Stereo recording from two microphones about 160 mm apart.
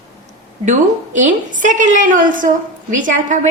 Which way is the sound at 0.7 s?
50° right (ahead or behind).